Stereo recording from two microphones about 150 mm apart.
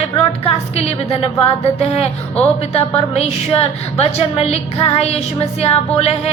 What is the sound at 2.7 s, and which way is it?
A woman's voice, 40° left (ahead or behind).